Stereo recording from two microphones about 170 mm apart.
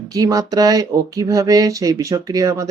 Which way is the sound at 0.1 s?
20° right (ahead or behind).